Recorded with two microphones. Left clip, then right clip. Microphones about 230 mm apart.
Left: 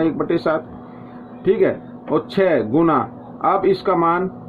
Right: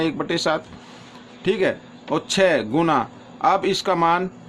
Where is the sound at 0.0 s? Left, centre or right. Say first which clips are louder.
Left 3 dB; right.